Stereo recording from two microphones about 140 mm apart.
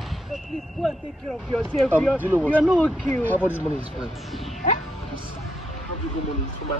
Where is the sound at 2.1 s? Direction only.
15° right (ahead or behind).